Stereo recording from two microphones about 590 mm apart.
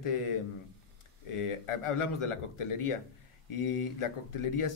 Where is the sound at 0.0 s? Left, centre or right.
Left.